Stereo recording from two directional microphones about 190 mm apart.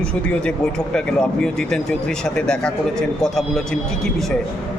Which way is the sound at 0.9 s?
5° left (ahead or behind).